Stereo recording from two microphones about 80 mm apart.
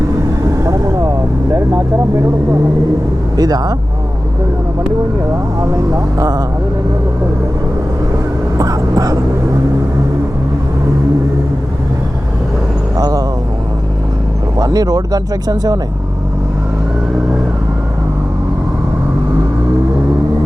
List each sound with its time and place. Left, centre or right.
3.3 s speech: right
5.9 s speech: right
8.5 s a sound: right
13.0 s vehicle: right
14.6 s speech: right